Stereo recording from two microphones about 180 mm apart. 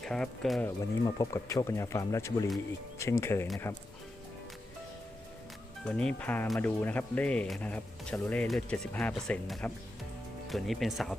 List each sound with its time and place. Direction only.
0.0 s speech: 5° left (ahead or behind)
0.6 s speech: 20° left (ahead or behind)
5.8 s speech: 5° left (ahead or behind)